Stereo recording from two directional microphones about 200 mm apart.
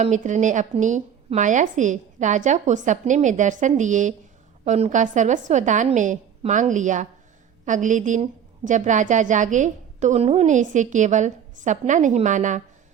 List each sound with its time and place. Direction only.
0.0 s a woman's voice: 35° right (ahead or behind)